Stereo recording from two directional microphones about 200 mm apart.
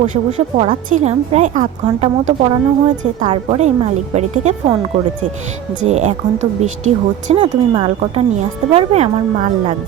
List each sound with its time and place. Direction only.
0.0 s a woman's voice: 35° right (ahead or behind)
5.8 s a woman's voice: 35° right (ahead or behind)
7.3 s a woman's voice: 30° right (ahead or behind)